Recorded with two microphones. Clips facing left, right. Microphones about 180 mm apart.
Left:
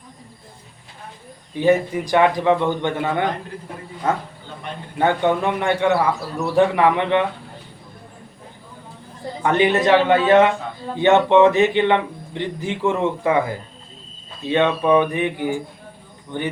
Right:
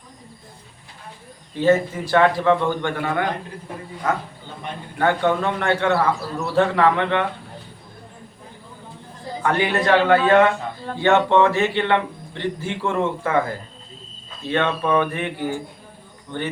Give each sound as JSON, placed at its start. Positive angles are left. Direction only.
{"t": 1.5, "sound": "a man's voice", "side_deg": 15}
{"t": 9.4, "sound": "a man's voice", "side_deg": 20}